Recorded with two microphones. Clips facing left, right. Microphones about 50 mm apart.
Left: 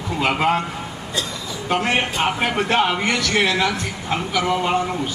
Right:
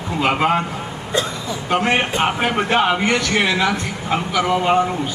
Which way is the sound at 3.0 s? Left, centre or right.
Right.